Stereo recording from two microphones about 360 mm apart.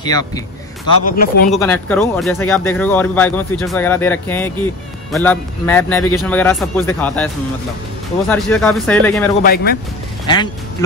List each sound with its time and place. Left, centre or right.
0.0 s speech: centre
1.0 s speech: left
1.5 s speech: centre
8.3 s speech: centre
9.4 s speech: left
10.2 s speech: centre